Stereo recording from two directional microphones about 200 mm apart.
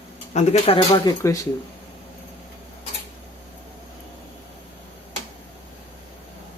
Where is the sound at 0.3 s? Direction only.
35° left (ahead or behind).